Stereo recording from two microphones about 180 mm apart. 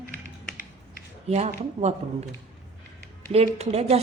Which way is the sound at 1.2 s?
35° right (ahead or behind).